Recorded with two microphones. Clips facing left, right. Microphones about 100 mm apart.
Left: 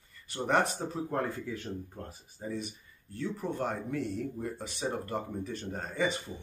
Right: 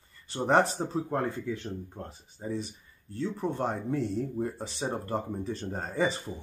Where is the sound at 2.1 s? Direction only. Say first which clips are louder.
Right 4 dB; 25° right (ahead or behind).